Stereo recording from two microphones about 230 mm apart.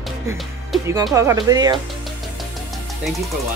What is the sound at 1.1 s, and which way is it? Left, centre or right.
Speech, centre.